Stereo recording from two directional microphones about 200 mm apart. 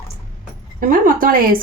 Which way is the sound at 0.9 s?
45° right (ahead or behind).